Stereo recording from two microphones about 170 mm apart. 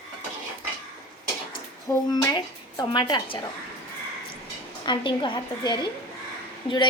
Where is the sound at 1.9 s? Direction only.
20° left (ahead or behind).